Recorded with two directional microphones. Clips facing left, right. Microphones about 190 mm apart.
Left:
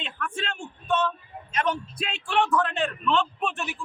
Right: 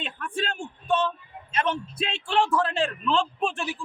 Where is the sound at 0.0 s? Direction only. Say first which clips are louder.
Right 2 dB; 35° right (ahead or behind).